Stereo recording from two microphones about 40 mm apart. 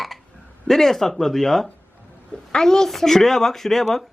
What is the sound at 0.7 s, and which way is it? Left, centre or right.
Speech, centre.